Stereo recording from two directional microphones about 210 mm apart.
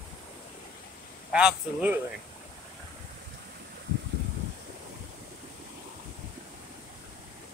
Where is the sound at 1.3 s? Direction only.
5° right (ahead or behind).